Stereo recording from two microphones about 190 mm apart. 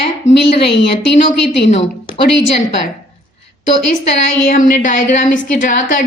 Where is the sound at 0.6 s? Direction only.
60° left (ahead or behind).